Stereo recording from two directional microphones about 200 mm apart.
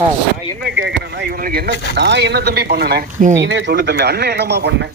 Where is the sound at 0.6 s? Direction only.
60° right (ahead or behind).